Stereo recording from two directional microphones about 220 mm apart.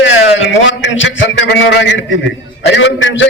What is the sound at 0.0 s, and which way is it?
A man's voice, 55° left (ahead or behind).